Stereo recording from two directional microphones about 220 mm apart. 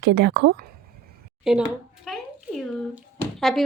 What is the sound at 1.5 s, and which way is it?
A child's voice, 5° right (ahead or behind).